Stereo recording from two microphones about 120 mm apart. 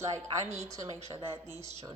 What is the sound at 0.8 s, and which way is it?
Speech, 60° right (ahead or behind).